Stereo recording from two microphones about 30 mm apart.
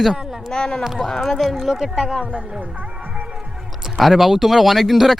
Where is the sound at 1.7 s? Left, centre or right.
Centre.